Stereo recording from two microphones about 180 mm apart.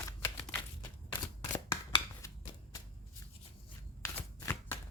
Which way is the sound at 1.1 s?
20° left (ahead or behind).